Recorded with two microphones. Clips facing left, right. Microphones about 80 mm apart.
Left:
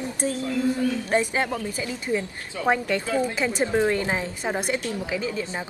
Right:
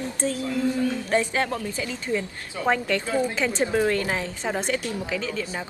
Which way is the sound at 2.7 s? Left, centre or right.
Centre.